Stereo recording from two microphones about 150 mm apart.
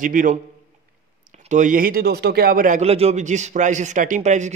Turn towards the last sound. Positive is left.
turn(degrees=-55)  # may be behind; listen again after turning